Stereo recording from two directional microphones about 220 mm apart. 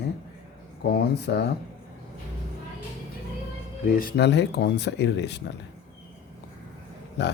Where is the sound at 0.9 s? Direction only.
45° left (ahead or behind).